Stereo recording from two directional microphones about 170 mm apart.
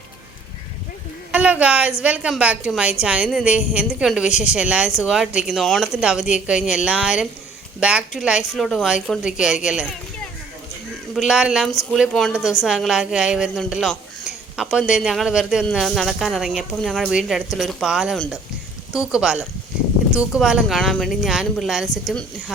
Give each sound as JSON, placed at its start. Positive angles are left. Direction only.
{"t": 1.3, "sound": "a woman's voice", "side_deg": -10}
{"t": 11.1, "sound": "speech", "side_deg": 0}